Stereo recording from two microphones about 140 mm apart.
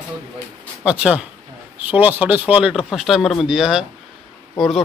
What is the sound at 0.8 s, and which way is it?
A man's voice, 10° right (ahead or behind).